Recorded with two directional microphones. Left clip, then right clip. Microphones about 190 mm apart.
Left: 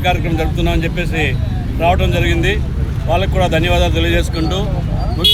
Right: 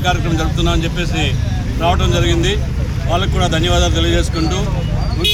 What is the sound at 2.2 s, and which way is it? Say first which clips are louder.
Speech: even; 50° left (ahead or behind).